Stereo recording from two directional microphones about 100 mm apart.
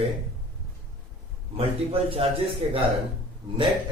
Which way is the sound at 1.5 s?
70° right (ahead or behind).